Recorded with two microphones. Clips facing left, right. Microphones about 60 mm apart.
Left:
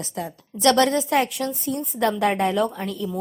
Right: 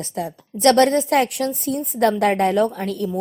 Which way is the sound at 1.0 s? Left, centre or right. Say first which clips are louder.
Right 3 dB; right.